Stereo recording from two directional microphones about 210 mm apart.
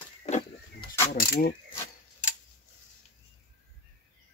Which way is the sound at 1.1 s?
45° left (ahead or behind).